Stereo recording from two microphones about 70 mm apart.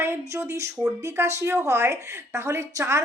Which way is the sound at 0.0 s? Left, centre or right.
Right.